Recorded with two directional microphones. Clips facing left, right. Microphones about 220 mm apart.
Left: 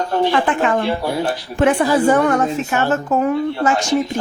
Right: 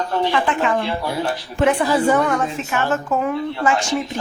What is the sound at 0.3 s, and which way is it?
Speech, 45° left (ahead or behind).